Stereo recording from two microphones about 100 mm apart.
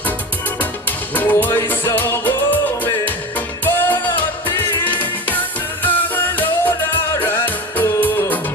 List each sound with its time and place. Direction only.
0.6 s music: 20° left (ahead or behind)